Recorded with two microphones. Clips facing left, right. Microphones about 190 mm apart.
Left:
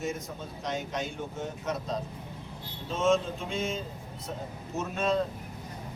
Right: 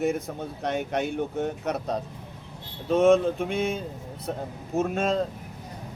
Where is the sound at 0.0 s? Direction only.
60° right (ahead or behind).